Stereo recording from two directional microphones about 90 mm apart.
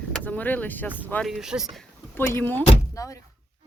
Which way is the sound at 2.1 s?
25° left (ahead or behind).